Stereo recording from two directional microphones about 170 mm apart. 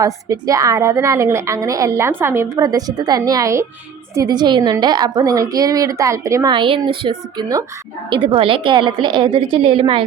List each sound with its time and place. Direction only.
0.0 s a woman's voice: 20° right (ahead or behind)